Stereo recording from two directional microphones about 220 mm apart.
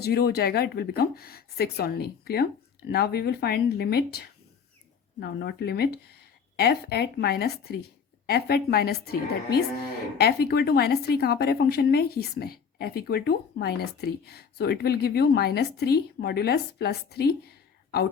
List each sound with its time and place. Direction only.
0.0 s a woman's voice: 45° left (ahead or behind)
10.2 s a woman's voice: 45° left (ahead or behind)